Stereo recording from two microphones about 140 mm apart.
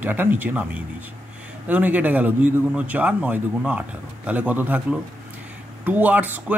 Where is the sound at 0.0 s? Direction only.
15° right (ahead or behind).